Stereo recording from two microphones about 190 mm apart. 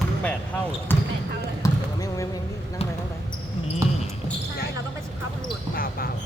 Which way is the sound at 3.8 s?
15° right (ahead or behind).